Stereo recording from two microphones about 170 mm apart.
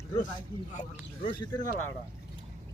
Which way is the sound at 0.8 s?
50° left (ahead or behind).